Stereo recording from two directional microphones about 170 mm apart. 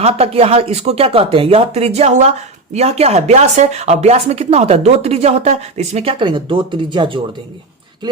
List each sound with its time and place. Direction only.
0.0 s speech: 35° right (ahead or behind)